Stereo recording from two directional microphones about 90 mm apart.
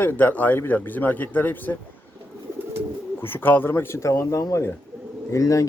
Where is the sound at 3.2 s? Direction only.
25° left (ahead or behind).